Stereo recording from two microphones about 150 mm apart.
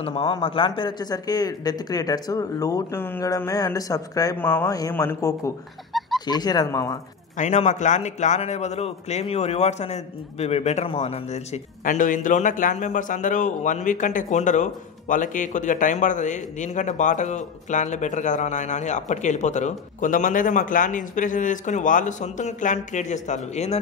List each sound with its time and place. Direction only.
0.0 s speech: 35° left (ahead or behind); by 5.5 s 20° left (ahead or behind)
5.9 s a sound: centre (ahead or behind)
6.2 s speech: 25° left (ahead or behind)
7.3 s a man's voice: 50° left (ahead or behind)
11.8 s a man's voice: 60° left (ahead or behind)